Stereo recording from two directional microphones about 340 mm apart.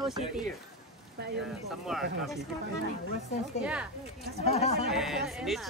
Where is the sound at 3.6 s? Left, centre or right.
Centre.